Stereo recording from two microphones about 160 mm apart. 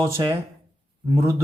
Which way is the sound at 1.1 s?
15° right (ahead or behind).